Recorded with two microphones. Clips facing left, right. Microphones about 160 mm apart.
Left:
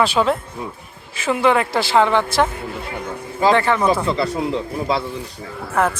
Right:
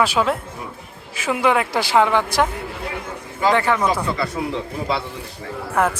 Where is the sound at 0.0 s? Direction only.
10° right (ahead or behind).